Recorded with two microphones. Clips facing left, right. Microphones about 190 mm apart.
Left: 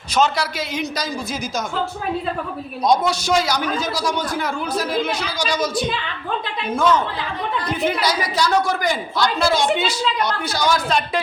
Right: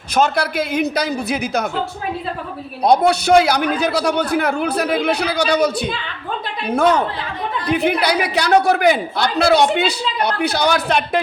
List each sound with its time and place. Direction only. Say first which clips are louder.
0.2 s a man's voice: right 3 dB; 55° right (ahead or behind)
2.8 s a man's voice: right 4 dB; 60° right (ahead or behind)